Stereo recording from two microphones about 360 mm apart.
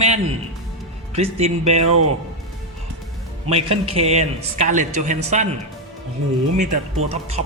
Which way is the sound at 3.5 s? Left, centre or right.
Centre.